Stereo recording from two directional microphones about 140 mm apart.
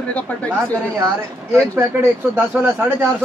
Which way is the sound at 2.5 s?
15° right (ahead or behind).